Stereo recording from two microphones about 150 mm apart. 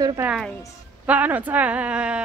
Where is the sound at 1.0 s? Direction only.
10° right (ahead or behind).